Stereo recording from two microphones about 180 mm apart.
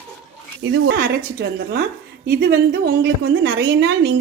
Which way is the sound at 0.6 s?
80° right.